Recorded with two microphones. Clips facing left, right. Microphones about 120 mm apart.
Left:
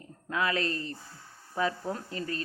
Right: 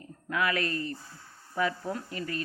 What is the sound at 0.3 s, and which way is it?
Speech, 25° left (ahead or behind).